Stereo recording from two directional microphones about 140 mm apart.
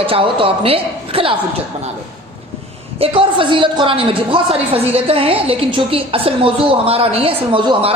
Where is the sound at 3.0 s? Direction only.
40° right (ahead or behind).